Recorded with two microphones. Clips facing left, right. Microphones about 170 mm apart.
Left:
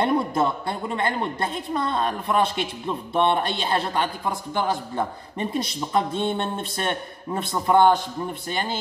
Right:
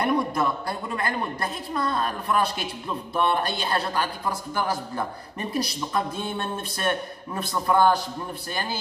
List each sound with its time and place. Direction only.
0.0 s a man's voice: 25° left (ahead or behind)